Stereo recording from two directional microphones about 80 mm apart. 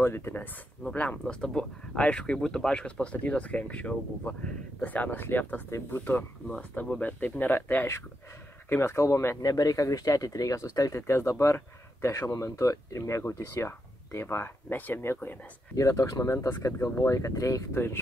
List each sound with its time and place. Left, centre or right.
0.0 s speech: left
0.9 s speech: centre; by 9.4 s left
9.4 s speech: left
12.3 s speech: left
15.7 s speech: left